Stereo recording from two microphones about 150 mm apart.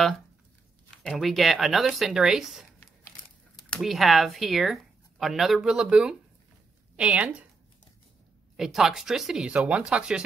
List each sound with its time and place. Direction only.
1.0 s speech: centre (ahead or behind)
3.7 s a woman's voice: centre (ahead or behind)
8.5 s speech: centre (ahead or behind)